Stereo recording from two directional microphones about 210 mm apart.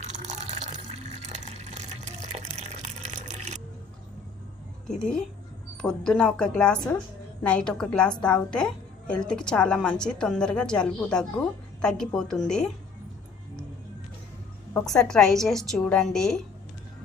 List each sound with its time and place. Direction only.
1.4 s water: 30° right (ahead or behind)
4.9 s a woman's voice: 5° left (ahead or behind)
14.7 s a woman's voice: 5° left (ahead or behind)